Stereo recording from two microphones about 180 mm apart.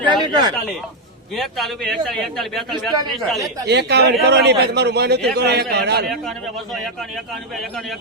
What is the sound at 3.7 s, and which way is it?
A man's voice, 70° right (ahead or behind).